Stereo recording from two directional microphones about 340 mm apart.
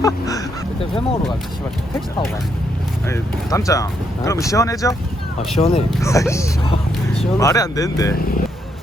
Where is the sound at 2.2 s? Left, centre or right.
Centre.